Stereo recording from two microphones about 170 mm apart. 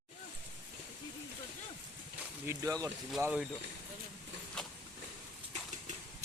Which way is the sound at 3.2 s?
5° right (ahead or behind).